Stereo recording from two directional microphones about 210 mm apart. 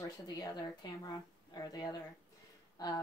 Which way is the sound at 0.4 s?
20° left (ahead or behind).